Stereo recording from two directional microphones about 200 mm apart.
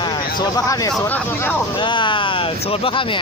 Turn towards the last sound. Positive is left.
turn(degrees=25)  # may be behind; listen again after turning